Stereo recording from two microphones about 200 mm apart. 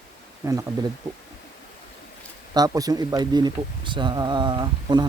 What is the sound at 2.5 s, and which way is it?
Speech, 20° right (ahead or behind).